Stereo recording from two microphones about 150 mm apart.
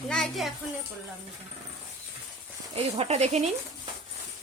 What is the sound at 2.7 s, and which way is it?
Speech, 40° right (ahead or behind).